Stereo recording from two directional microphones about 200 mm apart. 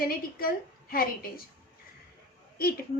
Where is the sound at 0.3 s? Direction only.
45° left (ahead or behind).